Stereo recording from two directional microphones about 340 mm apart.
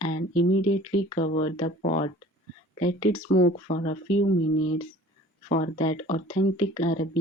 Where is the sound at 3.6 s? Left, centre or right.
Left.